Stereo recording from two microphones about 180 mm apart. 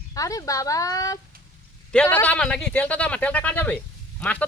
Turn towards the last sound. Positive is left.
turn(degrees=5)  # may be behind; listen again after turning